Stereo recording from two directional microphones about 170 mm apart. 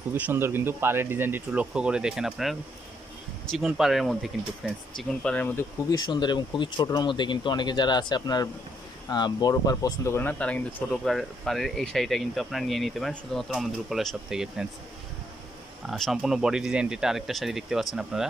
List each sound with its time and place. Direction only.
0.1 s speech: 15° right (ahead or behind)
3.5 s speech: 5° right (ahead or behind)
5.9 s speech: 25° left (ahead or behind); by 14.7 s 5° right (ahead or behind)
15.9 s speech: centre (ahead or behind)